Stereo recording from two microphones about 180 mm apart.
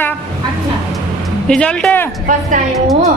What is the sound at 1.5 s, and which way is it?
Speech, 5° left (ahead or behind).